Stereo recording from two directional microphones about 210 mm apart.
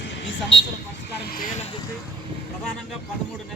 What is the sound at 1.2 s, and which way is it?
Speech, 45° left (ahead or behind).